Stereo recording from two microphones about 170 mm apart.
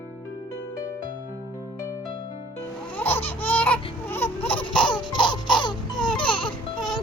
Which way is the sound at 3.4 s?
10° left (ahead or behind).